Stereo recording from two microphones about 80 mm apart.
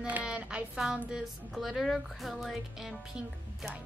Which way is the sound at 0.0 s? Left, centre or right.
Centre.